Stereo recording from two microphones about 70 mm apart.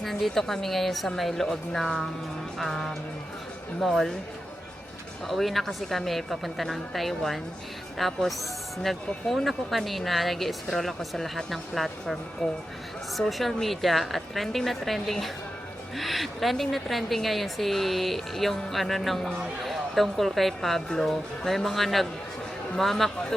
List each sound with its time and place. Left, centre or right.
0.0 s a woman's voice: centre
5.2 s a woman's voice: centre